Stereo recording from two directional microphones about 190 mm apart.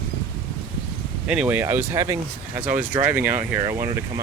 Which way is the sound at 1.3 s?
5° right (ahead or behind).